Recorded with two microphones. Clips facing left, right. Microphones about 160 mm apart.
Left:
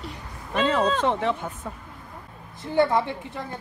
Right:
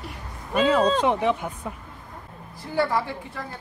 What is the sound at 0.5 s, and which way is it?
Speech, 10° right (ahead or behind).